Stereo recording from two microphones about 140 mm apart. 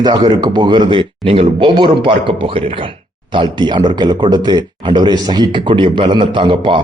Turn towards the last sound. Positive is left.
turn(degrees=-35)  # may be behind; listen again after turning